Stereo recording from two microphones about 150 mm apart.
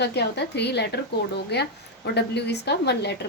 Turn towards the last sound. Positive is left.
turn(degrees=90)